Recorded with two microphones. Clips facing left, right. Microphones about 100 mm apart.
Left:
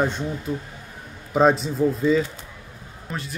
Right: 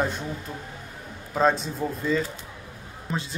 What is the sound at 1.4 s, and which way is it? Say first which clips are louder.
Speech: left 5 dB; centre (ahead or behind).